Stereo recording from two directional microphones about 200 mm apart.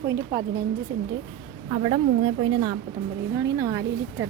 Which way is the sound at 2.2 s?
25° right (ahead or behind).